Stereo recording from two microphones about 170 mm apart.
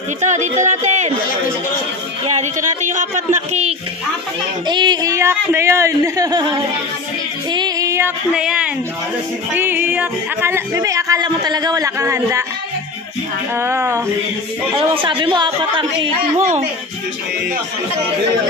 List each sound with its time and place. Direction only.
0.2 s speech: 45° right (ahead or behind)
2.2 s speech: 45° right (ahead or behind)
4.6 s speech: 25° right (ahead or behind)
7.5 s female singing: 20° right (ahead or behind)
8.3 s a woman's voice: 5° right (ahead or behind)
13.6 s speech: 15° right (ahead or behind)
15.0 s speech: 30° right (ahead or behind)